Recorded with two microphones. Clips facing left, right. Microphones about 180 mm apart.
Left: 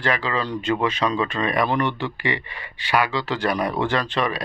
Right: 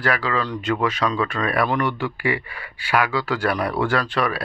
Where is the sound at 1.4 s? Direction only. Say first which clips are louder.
Right 1 dB; 15° left (ahead or behind).